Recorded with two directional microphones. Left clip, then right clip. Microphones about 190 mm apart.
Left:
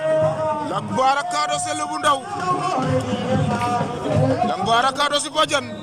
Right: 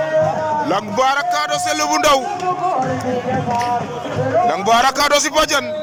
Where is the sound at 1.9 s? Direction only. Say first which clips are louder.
Right 5 dB; 10° right (ahead or behind).